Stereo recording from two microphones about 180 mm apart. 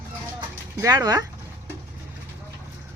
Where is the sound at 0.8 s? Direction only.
20° right (ahead or behind).